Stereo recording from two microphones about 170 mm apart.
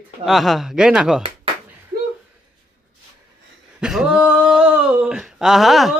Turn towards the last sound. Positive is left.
turn(degrees=0)  # may be behind; listen again after turning